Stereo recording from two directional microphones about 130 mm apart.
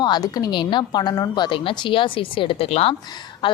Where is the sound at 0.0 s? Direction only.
30° left (ahead or behind); by 2.9 s 50° left (ahead or behind).